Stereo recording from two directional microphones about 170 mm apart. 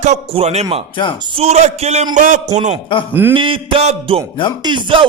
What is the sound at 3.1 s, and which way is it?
Speech, 10° right (ahead or behind).